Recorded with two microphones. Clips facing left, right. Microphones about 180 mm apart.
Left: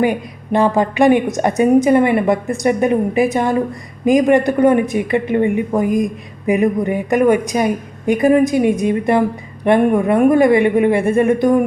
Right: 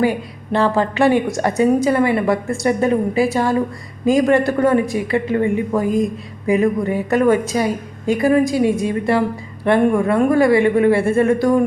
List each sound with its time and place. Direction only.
0.0 s a woman's voice: 15° left (ahead or behind)